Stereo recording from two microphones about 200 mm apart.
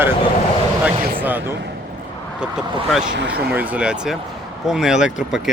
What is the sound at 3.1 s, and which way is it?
Speech, 60° right (ahead or behind).